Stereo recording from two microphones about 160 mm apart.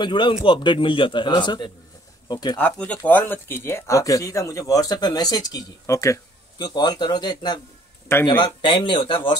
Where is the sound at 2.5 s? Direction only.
10° left (ahead or behind).